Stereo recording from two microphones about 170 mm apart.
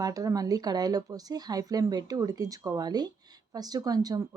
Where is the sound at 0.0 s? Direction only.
20° right (ahead or behind).